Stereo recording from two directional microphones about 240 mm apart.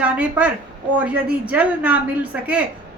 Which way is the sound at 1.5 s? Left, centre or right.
Centre.